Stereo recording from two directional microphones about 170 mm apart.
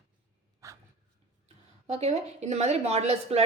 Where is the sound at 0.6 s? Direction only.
20° right (ahead or behind).